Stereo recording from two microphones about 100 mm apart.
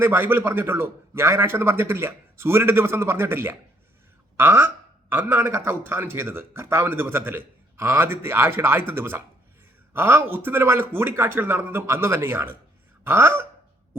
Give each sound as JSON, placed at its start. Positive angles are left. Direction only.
{"t": 0.0, "sound": "a man's voice", "side_deg": -20}